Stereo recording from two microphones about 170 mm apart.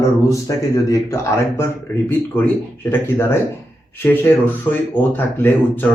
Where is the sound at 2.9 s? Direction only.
15° left (ahead or behind).